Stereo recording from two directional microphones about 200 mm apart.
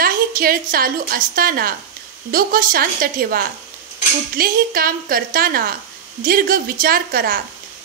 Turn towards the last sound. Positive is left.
turn(degrees=-45)  # may be behind; listen again after turning